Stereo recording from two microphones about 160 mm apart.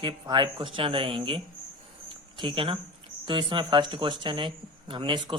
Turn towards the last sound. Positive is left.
turn(degrees=-30)  # may be behind; listen again after turning